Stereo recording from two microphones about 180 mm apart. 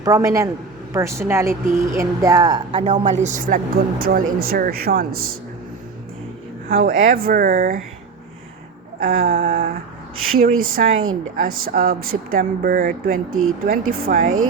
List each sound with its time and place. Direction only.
0.0 s speech: 20° right (ahead or behind)
2.7 s speech: 40° right (ahead or behind); by 5.3 s 55° right (ahead or behind)
6.7 s speech: 55° right (ahead or behind)
9.0 s speech: 55° right (ahead or behind)